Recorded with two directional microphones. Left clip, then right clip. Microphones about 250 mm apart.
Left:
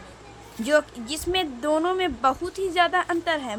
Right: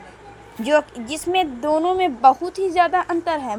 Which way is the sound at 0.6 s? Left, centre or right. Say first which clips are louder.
Right 3 dB; centre.